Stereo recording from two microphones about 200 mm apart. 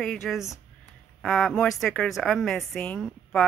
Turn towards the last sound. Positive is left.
turn(degrees=5)  # may be behind; listen again after turning